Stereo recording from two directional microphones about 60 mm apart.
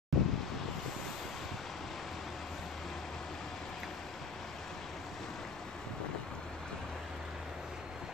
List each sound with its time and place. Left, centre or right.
0.1 s wind: centre